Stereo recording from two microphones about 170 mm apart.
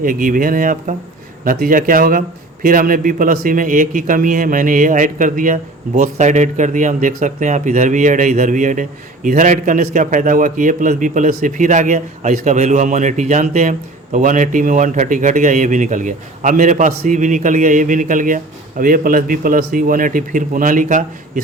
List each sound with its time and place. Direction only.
0.0 s a man's voice: 55° right (ahead or behind)